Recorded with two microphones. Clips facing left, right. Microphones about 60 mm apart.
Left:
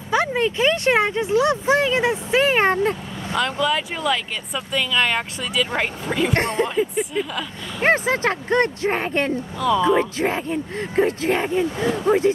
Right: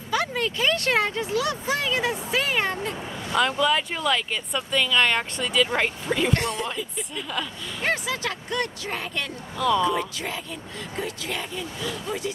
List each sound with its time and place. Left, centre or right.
0.1 s speech: left
3.3 s speech: centre
6.3 s speech: left
7.8 s speech: left
9.6 s speech: centre
9.8 s speech: left